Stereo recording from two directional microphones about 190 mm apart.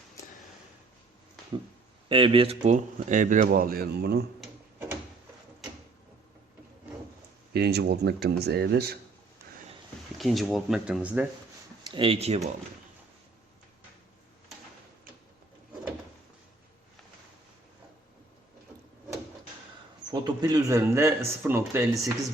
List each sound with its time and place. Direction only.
2.0 s speech: 25° right (ahead or behind); by 4.3 s 60° right (ahead or behind)
7.5 s speech: 60° right (ahead or behind)
10.2 s speech: centre (ahead or behind)
11.9 s speech: 30° right (ahead or behind)
20.1 s speech: 20° right (ahead or behind)